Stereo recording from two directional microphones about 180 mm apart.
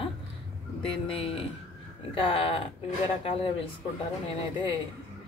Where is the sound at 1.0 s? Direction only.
30° left (ahead or behind).